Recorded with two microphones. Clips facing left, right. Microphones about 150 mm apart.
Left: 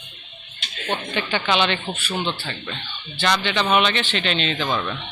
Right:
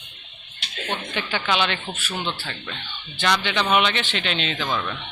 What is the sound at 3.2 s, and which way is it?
Speech, 10° right (ahead or behind).